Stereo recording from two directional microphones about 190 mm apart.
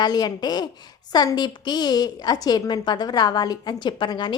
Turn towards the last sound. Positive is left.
turn(degrees=25)  # may be behind; listen again after turning